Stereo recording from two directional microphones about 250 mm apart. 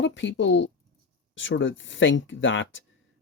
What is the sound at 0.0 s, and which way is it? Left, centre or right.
Speech, left.